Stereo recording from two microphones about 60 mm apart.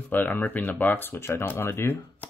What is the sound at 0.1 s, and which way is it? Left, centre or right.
Speech, left.